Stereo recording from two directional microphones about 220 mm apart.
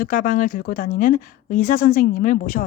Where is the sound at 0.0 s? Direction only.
40° left (ahead or behind).